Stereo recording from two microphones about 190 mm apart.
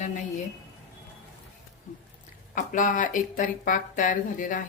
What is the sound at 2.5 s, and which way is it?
Speech, 45° left (ahead or behind).